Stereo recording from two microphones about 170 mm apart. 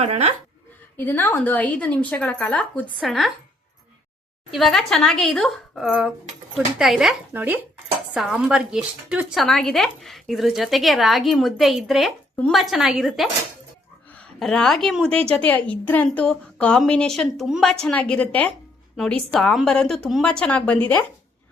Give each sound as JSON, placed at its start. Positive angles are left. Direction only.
{"t": 0.0, "sound": "speech", "side_deg": -40}
{"t": 0.9, "sound": "a woman's voice", "side_deg": 10}
{"t": 4.5, "sound": "a woman's voice", "side_deg": 0}